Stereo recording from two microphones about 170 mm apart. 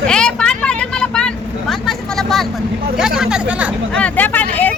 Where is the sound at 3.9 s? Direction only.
10° left (ahead or behind).